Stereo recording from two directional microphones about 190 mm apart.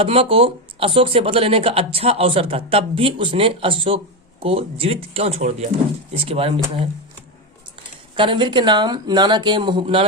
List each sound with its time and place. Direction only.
0.0 s speech: 30° right (ahead or behind)
8.1 s speech: 25° right (ahead or behind)